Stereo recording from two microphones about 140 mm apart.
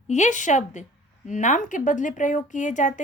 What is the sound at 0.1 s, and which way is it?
A woman's voice, 60° left (ahead or behind).